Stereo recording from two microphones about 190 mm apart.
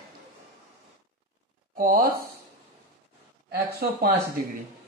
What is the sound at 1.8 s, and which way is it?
Speech, 50° right (ahead or behind).